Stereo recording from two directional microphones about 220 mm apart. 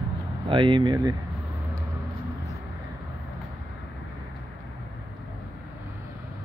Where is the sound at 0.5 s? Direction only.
20° right (ahead or behind).